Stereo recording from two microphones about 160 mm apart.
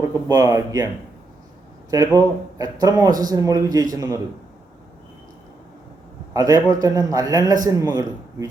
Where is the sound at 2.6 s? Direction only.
20° right (ahead or behind).